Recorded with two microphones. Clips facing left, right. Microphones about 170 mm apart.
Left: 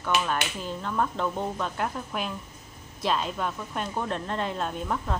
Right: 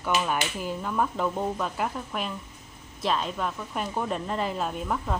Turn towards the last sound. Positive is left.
turn(degrees=-5)  # may be behind; listen again after turning